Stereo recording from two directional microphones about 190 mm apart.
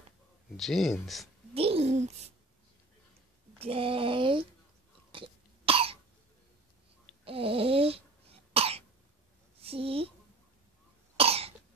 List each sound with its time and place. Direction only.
0.6 s speech: centre (ahead or behind)
1.5 s a child's voice: 30° right (ahead or behind)
3.5 s speech: 30° right (ahead or behind)
5.1 s cough: 30° right (ahead or behind)
7.2 s cough: 30° right (ahead or behind)
9.6 s speech: 30° right (ahead or behind)
11.1 s cough: 30° right (ahead or behind)